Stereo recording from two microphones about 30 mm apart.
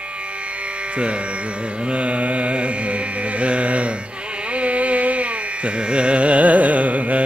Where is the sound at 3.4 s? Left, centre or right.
Right.